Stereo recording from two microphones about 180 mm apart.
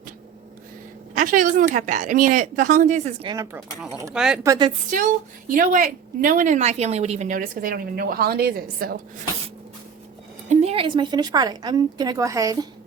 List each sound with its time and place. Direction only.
1.1 s a woman's voice: 50° right (ahead or behind)
3.2 s speech: 20° right (ahead or behind)
4.1 s speech: 5° right (ahead or behind)
4.4 s a woman's voice: 25° right (ahead or behind)
4.9 s a woman's voice: 45° right (ahead or behind)
10.5 s a woman's voice: 35° right (ahead or behind); by 12.6 s 20° right (ahead or behind)